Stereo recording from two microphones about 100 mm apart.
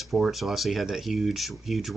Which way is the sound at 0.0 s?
Centre (ahead or behind).